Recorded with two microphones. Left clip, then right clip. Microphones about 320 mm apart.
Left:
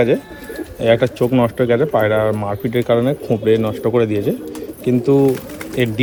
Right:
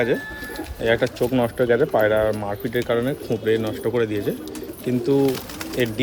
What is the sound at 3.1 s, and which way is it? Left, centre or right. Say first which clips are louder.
Speech: left 6 dB; left.